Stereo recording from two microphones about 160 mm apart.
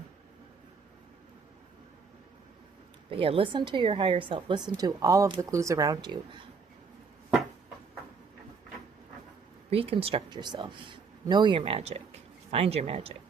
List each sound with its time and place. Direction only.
3.1 s speech: 35° right (ahead or behind)
9.6 s speech: 35° right (ahead or behind)